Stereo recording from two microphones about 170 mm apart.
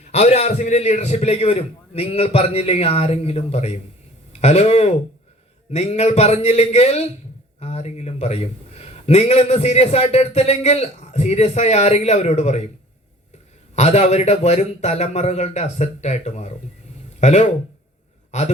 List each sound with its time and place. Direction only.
0.0 s a man's voice: 40° left (ahead or behind)
13.7 s a man's voice: 40° left (ahead or behind)